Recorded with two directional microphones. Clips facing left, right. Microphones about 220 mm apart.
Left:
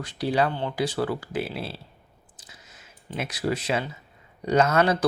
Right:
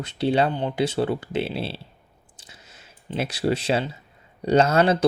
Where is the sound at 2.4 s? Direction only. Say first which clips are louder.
Right 2 dB; 30° right (ahead or behind).